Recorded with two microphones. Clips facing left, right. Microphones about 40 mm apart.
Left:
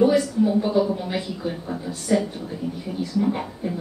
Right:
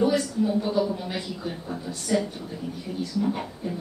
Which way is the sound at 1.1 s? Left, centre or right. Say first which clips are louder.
Left 4 dB; centre.